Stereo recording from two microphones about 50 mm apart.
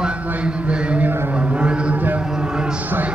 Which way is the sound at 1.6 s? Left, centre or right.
Right.